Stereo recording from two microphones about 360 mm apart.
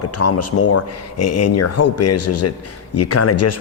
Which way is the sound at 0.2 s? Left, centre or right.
Left.